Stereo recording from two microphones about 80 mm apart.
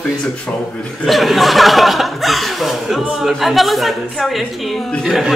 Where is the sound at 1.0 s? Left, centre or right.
Centre.